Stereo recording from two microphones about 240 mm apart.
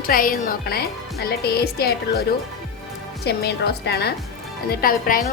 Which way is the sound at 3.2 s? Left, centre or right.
Left.